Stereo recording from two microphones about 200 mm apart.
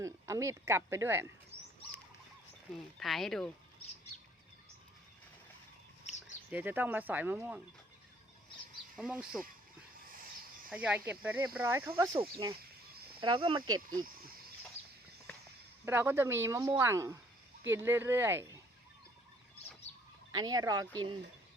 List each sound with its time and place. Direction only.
0.0 s speech: 15° right (ahead or behind)
2.7 s speech: centre (ahead or behind)
6.5 s speech: 10° right (ahead or behind)
9.0 s speech: 5° right (ahead or behind)
10.7 s speech: 5° right (ahead or behind)
13.2 s speech: 25° right (ahead or behind)
15.9 s speech: 10° right (ahead or behind)
20.3 s speech: 20° right (ahead or behind)